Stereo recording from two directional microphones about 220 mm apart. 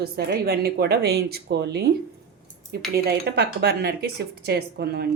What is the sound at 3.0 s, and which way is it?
A woman's voice, 45° right (ahead or behind).